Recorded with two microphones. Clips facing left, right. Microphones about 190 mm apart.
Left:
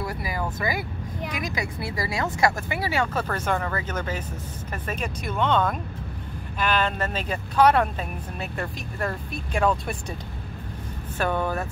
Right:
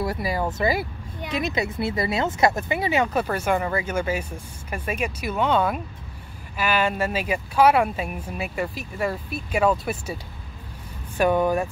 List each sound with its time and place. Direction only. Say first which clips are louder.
0.0 s speech: right 5 dB; 30° right (ahead or behind); by 10.1 s 5° right (ahead or behind)
11.1 s speech: right 6 dB; 15° right (ahead or behind)